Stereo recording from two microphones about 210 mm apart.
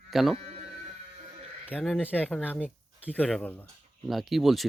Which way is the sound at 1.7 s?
5° left (ahead or behind).